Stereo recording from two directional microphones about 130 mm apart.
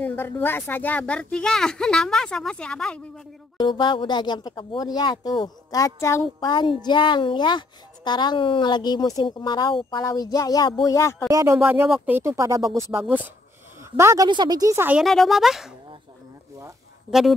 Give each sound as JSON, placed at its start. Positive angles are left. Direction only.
{"t": 0.0, "sound": "speech", "side_deg": 15}
{"t": 3.5, "sound": "speech", "side_deg": 35}
{"t": 6.2, "sound": "speech", "side_deg": 35}
{"t": 11.2, "sound": "speech", "side_deg": -25}
{"t": 13.9, "sound": "speech", "side_deg": -20}
{"t": 14.2, "sound": "a woman's voice", "side_deg": -35}
{"t": 15.0, "sound": "speech", "side_deg": 0}